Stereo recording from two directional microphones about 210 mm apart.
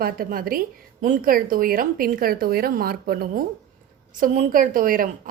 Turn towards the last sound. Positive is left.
turn(degrees=-40)  # may be behind; listen again after turning